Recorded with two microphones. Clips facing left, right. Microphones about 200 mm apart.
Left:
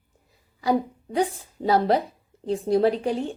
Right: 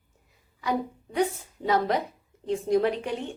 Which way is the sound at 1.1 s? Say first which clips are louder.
Left 2 dB; 30° left (ahead or behind).